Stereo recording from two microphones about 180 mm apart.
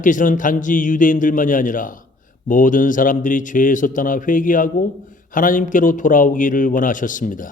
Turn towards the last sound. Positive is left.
turn(degrees=45)  # may be behind; listen again after turning